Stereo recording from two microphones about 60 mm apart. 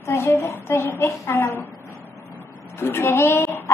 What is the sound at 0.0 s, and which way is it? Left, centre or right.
A woman's voice, left.